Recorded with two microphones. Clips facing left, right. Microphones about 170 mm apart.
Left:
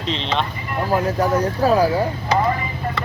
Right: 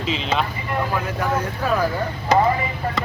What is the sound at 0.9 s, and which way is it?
Speech, 40° left (ahead or behind).